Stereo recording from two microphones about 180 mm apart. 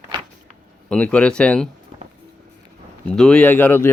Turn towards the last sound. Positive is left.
turn(degrees=10)  # may be behind; listen again after turning